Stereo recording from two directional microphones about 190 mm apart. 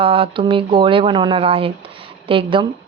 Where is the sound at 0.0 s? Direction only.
30° right (ahead or behind).